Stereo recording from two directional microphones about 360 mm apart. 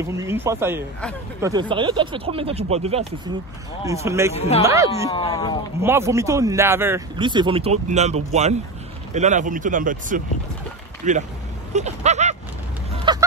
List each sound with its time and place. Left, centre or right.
0.0 s speech: centre
4.3 s speech: centre
4.6 s speech: centre
5.1 s speech: centre
5.8 s speech: centre
13.1 s vehicle: centre